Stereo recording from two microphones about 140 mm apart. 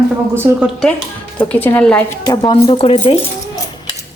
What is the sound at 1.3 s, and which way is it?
Speech, 10° left (ahead or behind).